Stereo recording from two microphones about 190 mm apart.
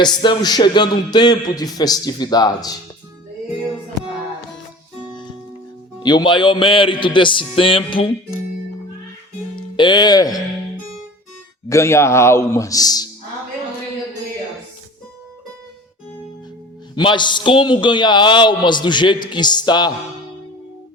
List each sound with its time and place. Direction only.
0.0 s a man's voice: 25° left (ahead or behind)
6.0 s a man's voice: 25° left (ahead or behind)
9.7 s a man's voice: 25° left (ahead or behind)
11.7 s a man's voice: 15° left (ahead or behind)
16.9 s a man's voice: 25° left (ahead or behind)